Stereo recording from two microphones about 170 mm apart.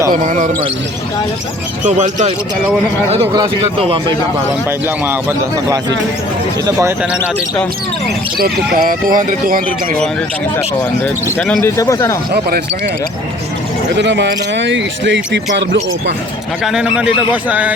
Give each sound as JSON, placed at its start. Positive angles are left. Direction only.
{"t": 0.1, "sound": "speech", "side_deg": -45}
{"t": 2.0, "sound": "speech", "side_deg": -45}
{"t": 3.6, "sound": "a man's voice", "side_deg": -35}
{"t": 6.7, "sound": "speech", "side_deg": -15}
{"t": 8.4, "sound": "speech", "side_deg": -60}
{"t": 11.0, "sound": "speech", "side_deg": 5}
{"t": 11.8, "sound": "speech", "side_deg": 15}
{"t": 12.3, "sound": "speech", "side_deg": -65}
{"t": 13.9, "sound": "speech", "side_deg": -90}
{"t": 16.6, "sound": "speech", "side_deg": -5}